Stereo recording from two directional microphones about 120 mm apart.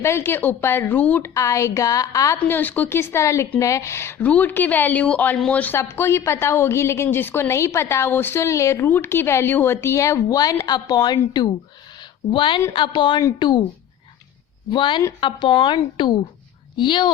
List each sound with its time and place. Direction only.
0.0 s speech: 20° left (ahead or behind)
1.3 s a woman's voice: 25° left (ahead or behind)
2.5 s a woman's voice: 15° left (ahead or behind); by 13.7 s 40° left (ahead or behind)
14.7 s a woman's voice: 40° left (ahead or behind)